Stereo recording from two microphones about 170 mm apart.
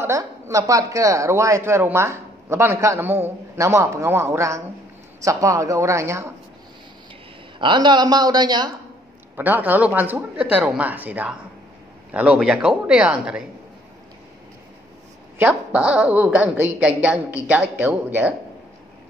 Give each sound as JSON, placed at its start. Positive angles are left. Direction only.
{"t": 0.0, "sound": "a woman's voice", "side_deg": -20}
{"t": 7.5, "sound": "speech", "side_deg": -30}
{"t": 9.4, "sound": "a woman's voice", "side_deg": -10}
{"t": 15.3, "sound": "a woman's voice", "side_deg": -10}